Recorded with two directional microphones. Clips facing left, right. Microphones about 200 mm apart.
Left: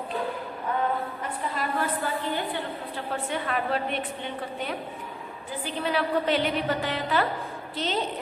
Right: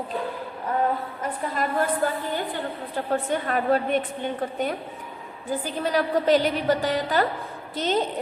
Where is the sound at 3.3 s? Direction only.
45° right (ahead or behind).